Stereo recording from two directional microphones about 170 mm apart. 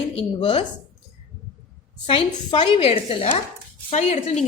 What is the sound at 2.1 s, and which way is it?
A woman's voice, 30° left (ahead or behind).